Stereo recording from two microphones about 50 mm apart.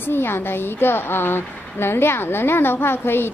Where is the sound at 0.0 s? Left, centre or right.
Left.